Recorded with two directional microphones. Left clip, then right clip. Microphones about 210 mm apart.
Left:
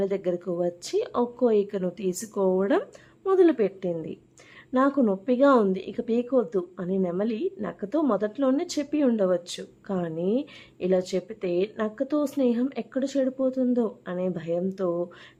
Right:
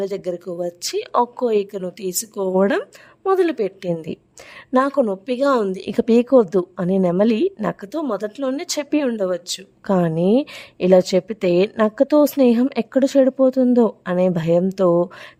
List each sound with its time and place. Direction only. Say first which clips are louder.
0.0 s speech: right 2 dB; 50° right (ahead or behind)